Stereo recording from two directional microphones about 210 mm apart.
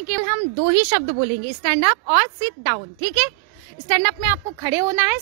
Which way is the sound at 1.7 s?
20° right (ahead or behind).